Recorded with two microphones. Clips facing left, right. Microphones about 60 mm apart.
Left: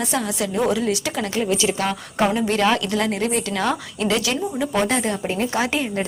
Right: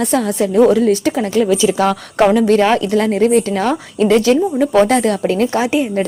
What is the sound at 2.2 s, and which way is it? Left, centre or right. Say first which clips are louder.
Speech: right 9 dB; right.